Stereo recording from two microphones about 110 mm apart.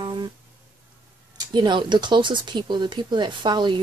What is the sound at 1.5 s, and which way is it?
Speech, 45° right (ahead or behind).